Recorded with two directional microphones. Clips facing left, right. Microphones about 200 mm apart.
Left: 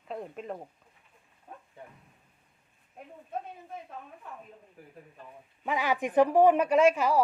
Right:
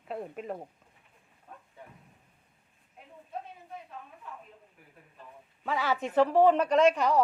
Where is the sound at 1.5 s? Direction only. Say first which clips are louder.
Left 3 dB; 15° left (ahead or behind).